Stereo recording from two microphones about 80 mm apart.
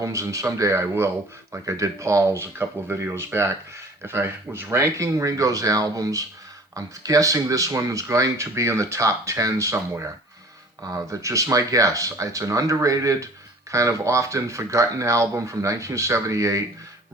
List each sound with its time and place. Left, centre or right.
0.0 s speech: right
9.7 s speech: right